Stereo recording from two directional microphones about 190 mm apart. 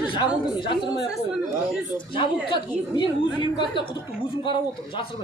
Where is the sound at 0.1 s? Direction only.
25° left (ahead or behind).